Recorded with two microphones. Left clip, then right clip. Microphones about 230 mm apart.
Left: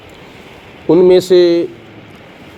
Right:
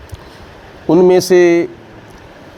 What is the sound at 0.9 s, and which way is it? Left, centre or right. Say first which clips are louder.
Speech: left 1 dB; right.